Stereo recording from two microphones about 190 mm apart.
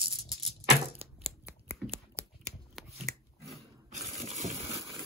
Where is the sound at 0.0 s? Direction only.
30° right (ahead or behind).